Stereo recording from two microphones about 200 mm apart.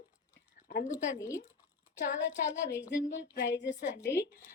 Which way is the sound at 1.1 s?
15° left (ahead or behind).